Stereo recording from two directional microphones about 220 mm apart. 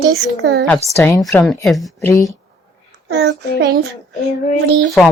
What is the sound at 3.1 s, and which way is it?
Speech, 50° right (ahead or behind).